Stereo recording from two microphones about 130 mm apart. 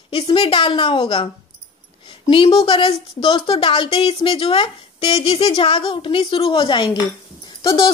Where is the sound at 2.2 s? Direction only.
45° left (ahead or behind).